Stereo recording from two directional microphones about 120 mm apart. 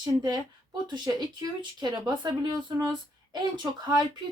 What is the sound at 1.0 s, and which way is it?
Speech, 35° right (ahead or behind).